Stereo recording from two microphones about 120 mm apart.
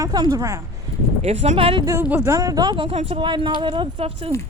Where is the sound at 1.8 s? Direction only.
25° right (ahead or behind).